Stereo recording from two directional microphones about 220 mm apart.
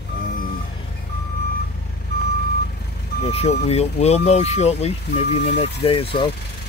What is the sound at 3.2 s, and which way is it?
Speech, 25° left (ahead or behind).